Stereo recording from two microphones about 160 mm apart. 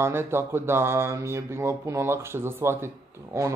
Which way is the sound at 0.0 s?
15° right (ahead or behind).